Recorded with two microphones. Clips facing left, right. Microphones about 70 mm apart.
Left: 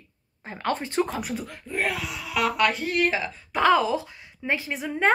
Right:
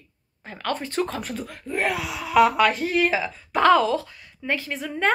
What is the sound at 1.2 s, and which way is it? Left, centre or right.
Speech, centre.